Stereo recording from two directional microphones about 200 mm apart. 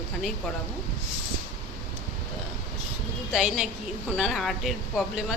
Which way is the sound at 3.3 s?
5° right (ahead or behind).